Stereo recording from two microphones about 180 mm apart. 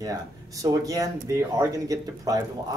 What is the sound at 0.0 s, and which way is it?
Speech, 20° right (ahead or behind).